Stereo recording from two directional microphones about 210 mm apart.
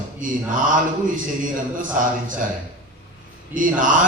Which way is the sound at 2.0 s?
40° right (ahead or behind).